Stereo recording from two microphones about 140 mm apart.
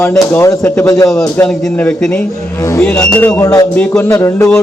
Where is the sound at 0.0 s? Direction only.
20° left (ahead or behind).